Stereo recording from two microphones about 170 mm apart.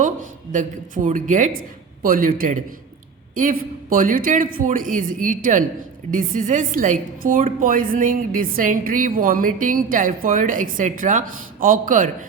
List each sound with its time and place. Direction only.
0.5 s a woman's voice: 50° right (ahead or behind)